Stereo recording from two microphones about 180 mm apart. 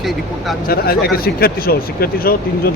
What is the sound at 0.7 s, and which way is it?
Speech, 55° left (ahead or behind).